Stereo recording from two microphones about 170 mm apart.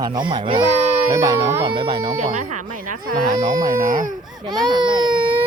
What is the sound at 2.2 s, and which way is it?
Speech, 45° right (ahead or behind).